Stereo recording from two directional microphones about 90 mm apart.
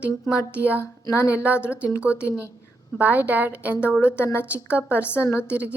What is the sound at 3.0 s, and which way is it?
A woman's voice, 20° right (ahead or behind).